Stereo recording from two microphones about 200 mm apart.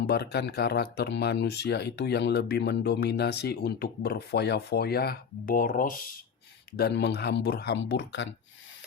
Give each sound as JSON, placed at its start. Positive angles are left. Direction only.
{"t": 0.1, "sound": "speech", "side_deg": 55}
{"t": 6.7, "sound": "speech", "side_deg": 55}